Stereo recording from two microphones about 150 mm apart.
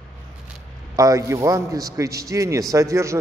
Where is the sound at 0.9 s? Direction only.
25° right (ahead or behind).